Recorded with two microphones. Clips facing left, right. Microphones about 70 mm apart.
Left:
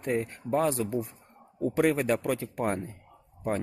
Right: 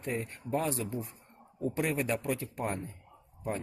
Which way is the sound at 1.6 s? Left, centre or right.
Left.